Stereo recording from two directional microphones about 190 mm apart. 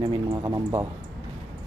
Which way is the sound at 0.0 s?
20° right (ahead or behind).